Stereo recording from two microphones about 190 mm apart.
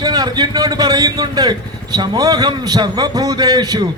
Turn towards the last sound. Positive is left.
turn(degrees=-20)  # may be behind; listen again after turning